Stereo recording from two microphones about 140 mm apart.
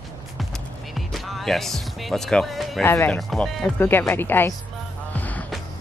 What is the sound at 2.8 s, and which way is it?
Speech, 15° left (ahead or behind).